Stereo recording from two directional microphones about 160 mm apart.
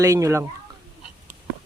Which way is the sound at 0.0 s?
20° right (ahead or behind).